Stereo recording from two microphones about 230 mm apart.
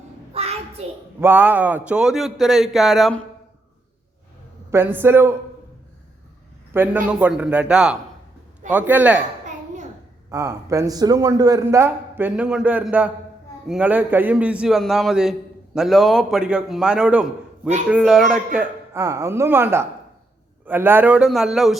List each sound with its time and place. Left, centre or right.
0.4 s a sound: right
0.8 s a woman's voice: right
1.2 s a man's voice: centre
4.7 s a man's voice: centre
6.7 s a man's voice: centre
10.2 s a man's voice: centre